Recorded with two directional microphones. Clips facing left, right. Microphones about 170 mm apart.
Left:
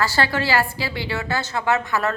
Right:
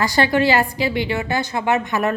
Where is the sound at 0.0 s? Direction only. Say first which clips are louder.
Right 5 dB; 15° right (ahead or behind).